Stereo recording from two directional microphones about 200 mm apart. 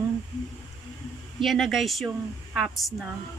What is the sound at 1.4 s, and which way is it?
Speech, centre (ahead or behind).